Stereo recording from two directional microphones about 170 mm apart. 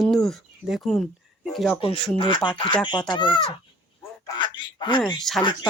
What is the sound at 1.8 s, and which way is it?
Speech, 30° left (ahead or behind).